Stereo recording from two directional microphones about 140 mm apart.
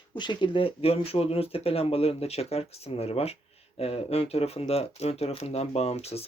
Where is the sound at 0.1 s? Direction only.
35° left (ahead or behind).